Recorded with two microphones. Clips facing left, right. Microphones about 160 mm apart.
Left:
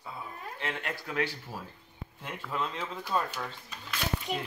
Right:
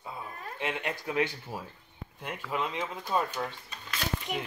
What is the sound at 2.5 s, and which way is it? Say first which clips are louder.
Speech: right 2 dB; 15° right (ahead or behind).